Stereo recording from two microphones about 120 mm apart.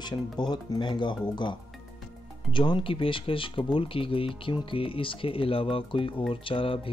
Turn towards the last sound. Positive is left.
turn(degrees=50)  # may be behind; listen again after turning